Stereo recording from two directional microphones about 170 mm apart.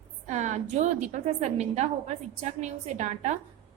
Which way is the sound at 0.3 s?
45° right (ahead or behind).